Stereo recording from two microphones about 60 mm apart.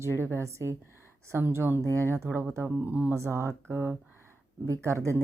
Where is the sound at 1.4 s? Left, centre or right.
Right.